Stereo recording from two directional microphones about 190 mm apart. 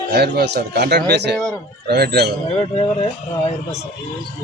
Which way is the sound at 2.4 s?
30° left (ahead or behind).